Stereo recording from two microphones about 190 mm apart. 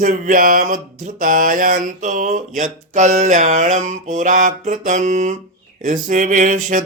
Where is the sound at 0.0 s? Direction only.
45° right (ahead or behind).